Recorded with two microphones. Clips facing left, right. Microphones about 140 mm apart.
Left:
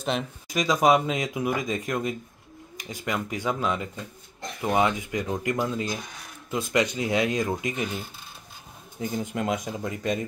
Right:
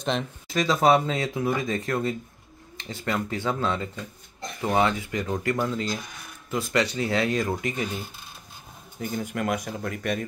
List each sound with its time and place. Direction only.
0.1 s speech: 5° left (ahead or behind)
0.5 s speech: 15° left (ahead or behind)
9.0 s speech: 20° left (ahead or behind)